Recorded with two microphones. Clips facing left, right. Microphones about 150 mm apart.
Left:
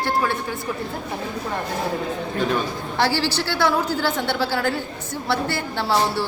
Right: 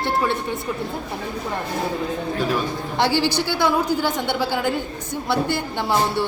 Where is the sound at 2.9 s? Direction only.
20° right (ahead or behind).